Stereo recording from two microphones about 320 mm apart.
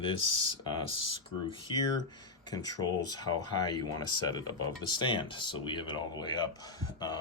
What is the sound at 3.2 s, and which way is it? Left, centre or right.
Speech, centre.